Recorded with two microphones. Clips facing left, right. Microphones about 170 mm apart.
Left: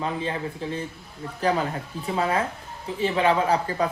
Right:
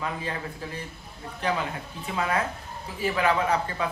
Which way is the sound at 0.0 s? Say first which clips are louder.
Left 4 dB; 25° left (ahead or behind).